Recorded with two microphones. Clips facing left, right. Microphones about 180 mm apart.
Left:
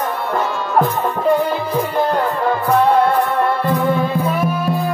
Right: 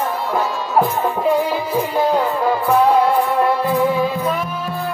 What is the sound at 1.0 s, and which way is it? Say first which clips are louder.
Music: left 1 dB; centre (ahead or behind).